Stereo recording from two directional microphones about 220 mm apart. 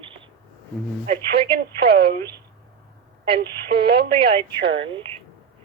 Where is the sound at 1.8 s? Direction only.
45° right (ahead or behind).